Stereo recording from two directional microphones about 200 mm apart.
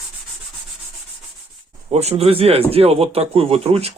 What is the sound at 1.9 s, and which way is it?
A man's voice, 30° right (ahead or behind).